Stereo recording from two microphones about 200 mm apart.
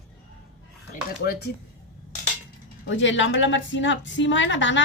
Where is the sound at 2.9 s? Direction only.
70° left (ahead or behind).